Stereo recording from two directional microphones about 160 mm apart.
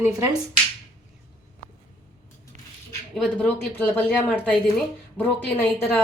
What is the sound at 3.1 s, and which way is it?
Speech, 5° left (ahead or behind).